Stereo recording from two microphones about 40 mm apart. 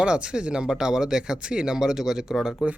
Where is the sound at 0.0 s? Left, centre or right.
Right.